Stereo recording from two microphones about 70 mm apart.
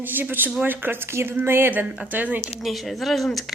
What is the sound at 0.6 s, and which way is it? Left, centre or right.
Speech, right.